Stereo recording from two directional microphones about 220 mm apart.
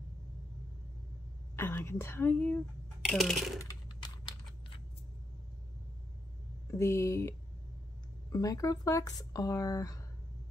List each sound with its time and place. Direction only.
1.6 s speech: 10° left (ahead or behind)
3.5 s a sound: 15° left (ahead or behind)
6.7 s speech: 15° left (ahead or behind)